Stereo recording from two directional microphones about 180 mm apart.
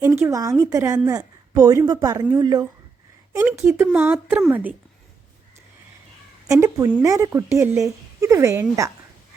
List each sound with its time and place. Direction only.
0.0 s a woman's voice: 10° right (ahead or behind)
6.5 s speech: 20° right (ahead or behind)